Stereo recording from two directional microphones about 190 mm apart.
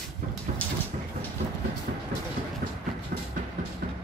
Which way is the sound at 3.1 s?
45° right (ahead or behind).